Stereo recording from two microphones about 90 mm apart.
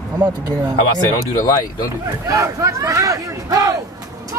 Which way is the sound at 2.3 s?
35° right (ahead or behind).